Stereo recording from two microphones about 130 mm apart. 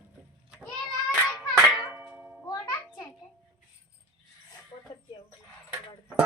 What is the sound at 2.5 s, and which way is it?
Music, 30° left (ahead or behind).